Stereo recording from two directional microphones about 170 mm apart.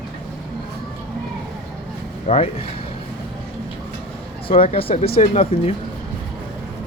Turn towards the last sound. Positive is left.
turn(degrees=40)  # may be behind; listen again after turning